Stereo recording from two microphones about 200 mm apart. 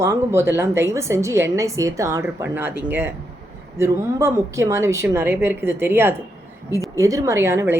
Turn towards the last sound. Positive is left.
turn(degrees=-15)  # may be behind; listen again after turning